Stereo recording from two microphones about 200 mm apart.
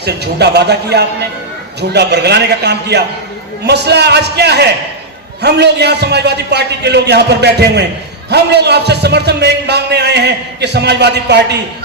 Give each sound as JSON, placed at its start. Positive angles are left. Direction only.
{"t": 0.0, "sound": "a man's voice", "side_deg": -55}